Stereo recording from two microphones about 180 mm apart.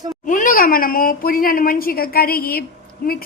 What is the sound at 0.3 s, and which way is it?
A woman's voice, 50° left (ahead or behind).